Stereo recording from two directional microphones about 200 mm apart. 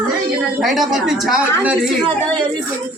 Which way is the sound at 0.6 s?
Centre (ahead or behind).